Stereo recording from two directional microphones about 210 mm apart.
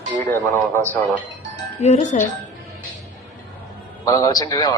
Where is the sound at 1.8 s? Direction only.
30° left (ahead or behind).